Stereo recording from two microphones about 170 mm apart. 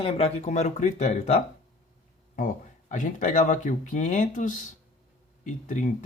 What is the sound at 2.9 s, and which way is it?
Speech, 50° left (ahead or behind).